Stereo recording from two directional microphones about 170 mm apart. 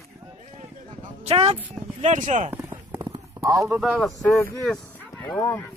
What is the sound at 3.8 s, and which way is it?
Speech, centre (ahead or behind).